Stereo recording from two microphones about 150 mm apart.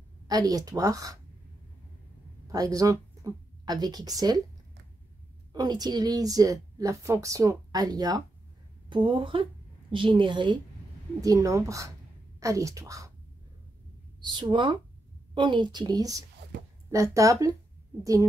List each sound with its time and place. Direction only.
0.3 s a woman's voice: 25° right (ahead or behind)
2.4 s speech: 25° right (ahead or behind)
5.5 s a woman's voice: 25° right (ahead or behind)
14.2 s a woman's voice: 30° right (ahead or behind)